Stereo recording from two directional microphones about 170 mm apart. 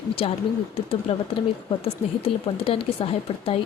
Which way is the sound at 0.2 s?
35° left (ahead or behind).